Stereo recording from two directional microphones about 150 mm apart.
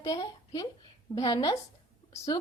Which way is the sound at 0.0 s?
25° left (ahead or behind).